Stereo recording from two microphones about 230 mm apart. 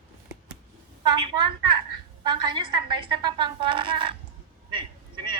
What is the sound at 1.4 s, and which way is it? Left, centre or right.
A woman's voice, right.